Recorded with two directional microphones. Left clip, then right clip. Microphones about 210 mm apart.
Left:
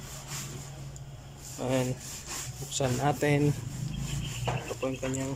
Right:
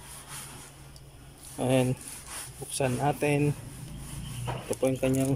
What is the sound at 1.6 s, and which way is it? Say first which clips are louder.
Speech: right 4 dB; 15° right (ahead or behind).